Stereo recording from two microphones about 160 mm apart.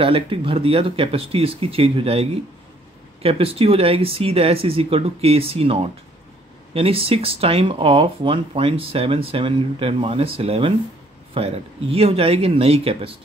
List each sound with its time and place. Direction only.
0.0 s speech: 35° right (ahead or behind)